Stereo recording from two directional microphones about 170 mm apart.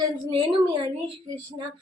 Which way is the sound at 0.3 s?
30° right (ahead or behind).